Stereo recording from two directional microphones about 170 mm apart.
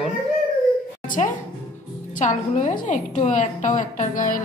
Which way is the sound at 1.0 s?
50° left (ahead or behind).